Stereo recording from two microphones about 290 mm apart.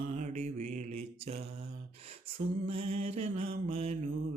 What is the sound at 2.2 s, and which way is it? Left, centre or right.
Speech, right.